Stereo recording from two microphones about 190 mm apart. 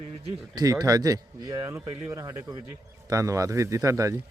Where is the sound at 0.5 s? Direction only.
20° right (ahead or behind).